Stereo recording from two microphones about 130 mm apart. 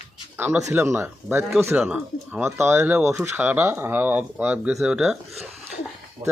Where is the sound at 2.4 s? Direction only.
20° right (ahead or behind); by 5.1 s 5° right (ahead or behind).